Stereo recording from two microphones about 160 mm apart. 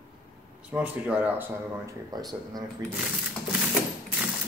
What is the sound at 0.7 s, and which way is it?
Speech, 10° right (ahead or behind).